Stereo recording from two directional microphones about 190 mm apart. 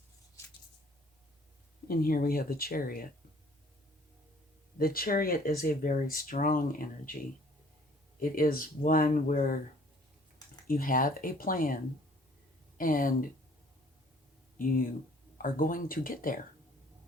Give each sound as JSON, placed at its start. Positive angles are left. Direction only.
{"t": 1.9, "sound": "speech", "side_deg": 50}
{"t": 4.8, "sound": "speech", "side_deg": 50}
{"t": 8.2, "sound": "speech", "side_deg": 50}
{"t": 10.7, "sound": "speech", "side_deg": 50}
{"t": 14.6, "sound": "speech", "side_deg": 50}